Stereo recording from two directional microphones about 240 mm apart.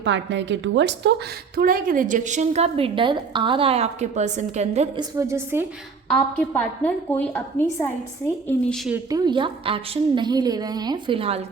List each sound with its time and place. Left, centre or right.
0.0 s a woman's voice: right
1.5 s a woman's voice: right
5.1 s a woman's voice: centre
6.1 s a woman's voice: centre
9.0 s a woman's voice: centre